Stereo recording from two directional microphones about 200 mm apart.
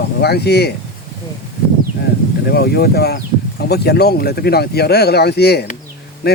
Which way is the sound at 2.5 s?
50° left (ahead or behind).